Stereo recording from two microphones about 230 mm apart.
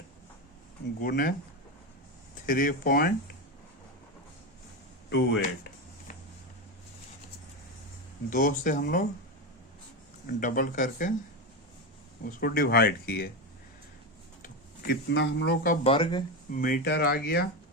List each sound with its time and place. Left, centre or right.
1.0 s speech: left
2.5 s speech: left
5.0 s speech: left
5.4 s a sound: left
8.3 s speech: left
10.2 s speech: left
12.2 s speech: left
14.4 s speech: left
15.9 s speech: centre
16.6 s speech: left